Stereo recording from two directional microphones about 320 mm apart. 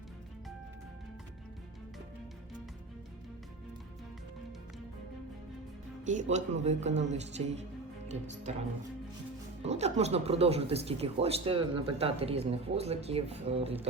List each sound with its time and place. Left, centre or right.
6.3 s speech: right
9.6 s speech: centre